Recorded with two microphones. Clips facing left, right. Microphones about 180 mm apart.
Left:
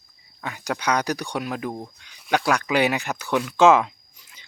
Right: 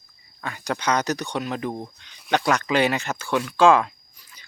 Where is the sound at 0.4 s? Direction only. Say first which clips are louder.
Even; 10° left (ahead or behind).